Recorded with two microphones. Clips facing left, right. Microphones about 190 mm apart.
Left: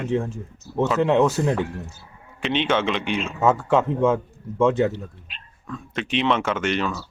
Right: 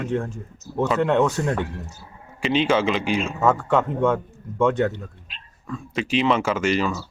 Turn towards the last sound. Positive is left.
turn(degrees=0)  # may be behind; listen again after turning